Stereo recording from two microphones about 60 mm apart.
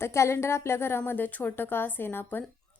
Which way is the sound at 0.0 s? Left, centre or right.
Left.